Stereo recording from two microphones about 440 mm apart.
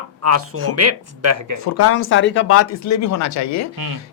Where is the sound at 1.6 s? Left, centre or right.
Left.